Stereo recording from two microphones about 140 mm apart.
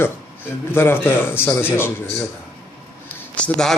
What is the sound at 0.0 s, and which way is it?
Speech, 15° left (ahead or behind).